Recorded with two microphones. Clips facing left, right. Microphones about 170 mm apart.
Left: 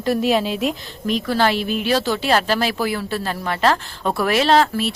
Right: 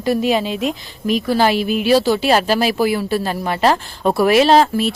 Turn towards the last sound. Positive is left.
turn(degrees=-15)  # may be behind; listen again after turning